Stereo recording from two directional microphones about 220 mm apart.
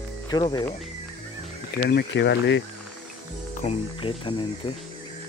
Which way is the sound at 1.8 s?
45° left (ahead or behind).